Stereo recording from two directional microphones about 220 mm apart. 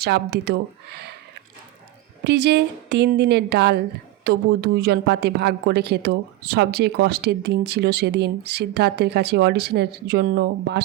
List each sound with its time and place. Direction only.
0.0 s speech: 45° right (ahead or behind)
2.2 s speech: 50° right (ahead or behind)